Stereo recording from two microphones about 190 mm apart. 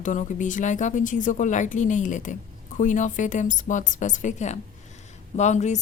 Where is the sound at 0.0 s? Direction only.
40° left (ahead or behind).